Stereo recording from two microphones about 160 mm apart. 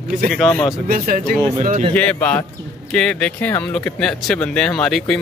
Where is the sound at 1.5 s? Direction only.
55° right (ahead or behind).